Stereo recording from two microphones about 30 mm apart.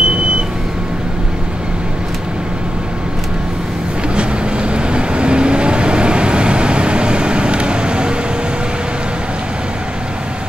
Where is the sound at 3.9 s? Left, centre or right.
Right.